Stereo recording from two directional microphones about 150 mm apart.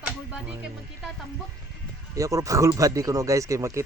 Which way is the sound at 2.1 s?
20° right (ahead or behind).